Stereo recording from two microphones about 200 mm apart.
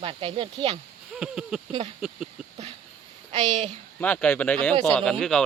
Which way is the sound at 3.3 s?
25° right (ahead or behind).